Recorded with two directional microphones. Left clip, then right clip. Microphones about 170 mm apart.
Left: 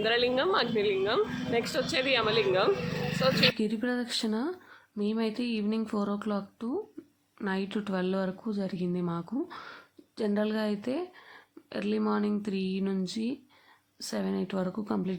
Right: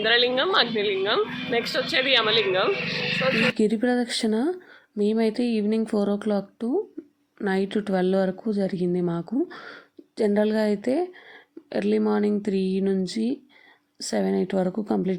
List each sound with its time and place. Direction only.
0.0 s a woman's voice: 10° left (ahead or behind)
3.6 s speech: 30° right (ahead or behind)